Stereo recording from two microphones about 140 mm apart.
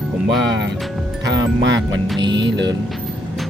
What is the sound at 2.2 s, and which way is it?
Speech, 30° right (ahead or behind).